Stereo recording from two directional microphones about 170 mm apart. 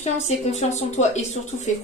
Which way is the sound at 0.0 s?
40° left (ahead or behind).